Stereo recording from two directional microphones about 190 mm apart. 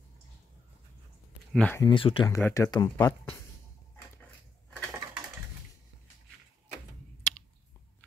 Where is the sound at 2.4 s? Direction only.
15° left (ahead or behind).